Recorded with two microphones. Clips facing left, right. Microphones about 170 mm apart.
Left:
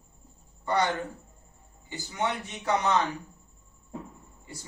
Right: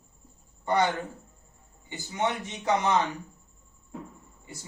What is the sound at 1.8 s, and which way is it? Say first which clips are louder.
Speech: right 1 dB; 20° right (ahead or behind).